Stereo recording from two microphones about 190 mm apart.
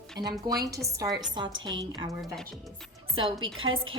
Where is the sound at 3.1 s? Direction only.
25° right (ahead or behind).